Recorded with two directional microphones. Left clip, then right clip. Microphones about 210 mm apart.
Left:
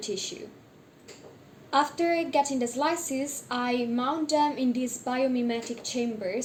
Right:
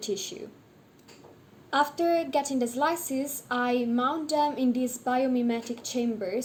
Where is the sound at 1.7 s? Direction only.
45° right (ahead or behind).